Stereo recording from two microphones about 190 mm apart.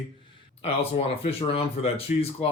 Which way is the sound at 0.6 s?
30° left (ahead or behind).